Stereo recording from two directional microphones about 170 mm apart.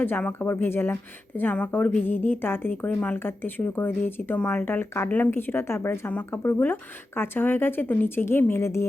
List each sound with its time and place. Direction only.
0.0 s a woman's voice: 10° left (ahead or behind)